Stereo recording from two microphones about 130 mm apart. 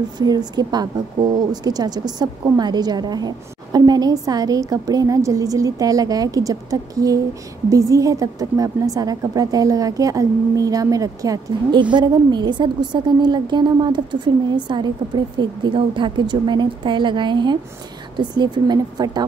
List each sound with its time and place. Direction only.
0.2 s a woman's voice: 30° right (ahead or behind)